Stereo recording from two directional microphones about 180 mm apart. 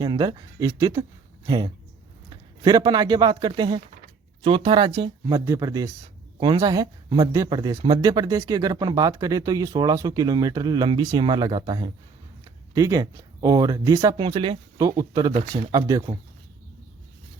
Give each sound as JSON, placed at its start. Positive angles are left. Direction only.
{"t": 0.0, "sound": "speech", "side_deg": -25}
{"t": 14.3, "sound": "speech", "side_deg": -30}